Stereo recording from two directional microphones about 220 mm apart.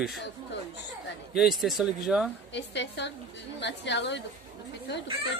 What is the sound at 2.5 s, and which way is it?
A woman's voice, 55° left (ahead or behind).